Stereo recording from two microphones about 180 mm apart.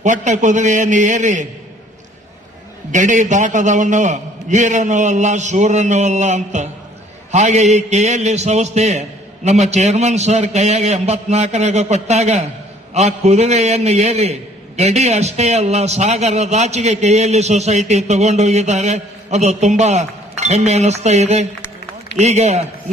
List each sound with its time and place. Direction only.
0.0 s a man's voice: 40° right (ahead or behind)
2.9 s a man's voice: 45° right (ahead or behind)